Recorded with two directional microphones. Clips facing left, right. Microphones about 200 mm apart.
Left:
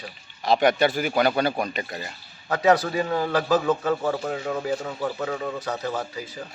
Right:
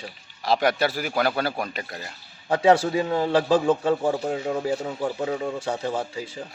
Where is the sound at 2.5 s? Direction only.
30° right (ahead or behind).